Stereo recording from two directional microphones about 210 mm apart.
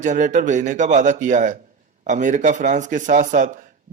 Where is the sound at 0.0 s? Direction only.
35° right (ahead or behind).